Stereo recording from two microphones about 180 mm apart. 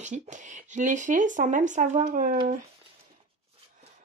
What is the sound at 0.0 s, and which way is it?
Speech, 45° right (ahead or behind).